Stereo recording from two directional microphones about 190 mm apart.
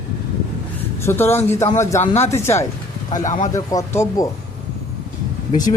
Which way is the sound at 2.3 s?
15° left (ahead or behind).